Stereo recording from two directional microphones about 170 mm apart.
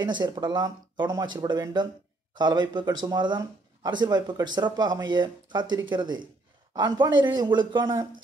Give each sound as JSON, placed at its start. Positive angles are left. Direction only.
{"t": 0.0, "sound": "speech", "side_deg": -25}